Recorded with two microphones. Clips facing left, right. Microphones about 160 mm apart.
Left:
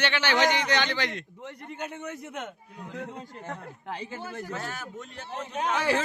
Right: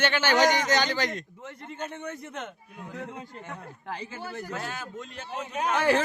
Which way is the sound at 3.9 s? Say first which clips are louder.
Left 1 dB; 20° left (ahead or behind).